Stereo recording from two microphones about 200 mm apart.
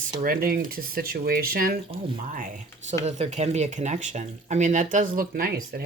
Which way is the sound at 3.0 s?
35° right (ahead or behind).